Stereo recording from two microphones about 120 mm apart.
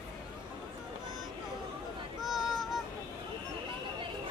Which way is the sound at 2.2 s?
Centre (ahead or behind).